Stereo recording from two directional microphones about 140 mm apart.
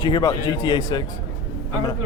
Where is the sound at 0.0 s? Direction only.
30° left (ahead or behind).